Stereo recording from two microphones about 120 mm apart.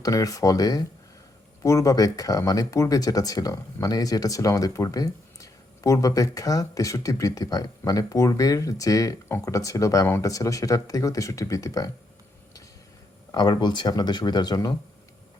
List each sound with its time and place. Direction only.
0.0 s speech: 30° left (ahead or behind)
13.3 s speech: 35° left (ahead or behind)